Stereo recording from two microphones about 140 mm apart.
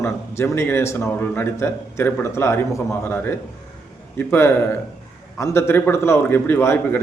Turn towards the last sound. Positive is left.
turn(degrees=15)  # may be behind; listen again after turning